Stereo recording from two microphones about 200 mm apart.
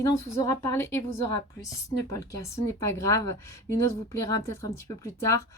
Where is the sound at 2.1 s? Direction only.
15° left (ahead or behind).